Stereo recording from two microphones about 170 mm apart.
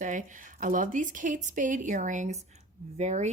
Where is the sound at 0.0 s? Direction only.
50° right (ahead or behind).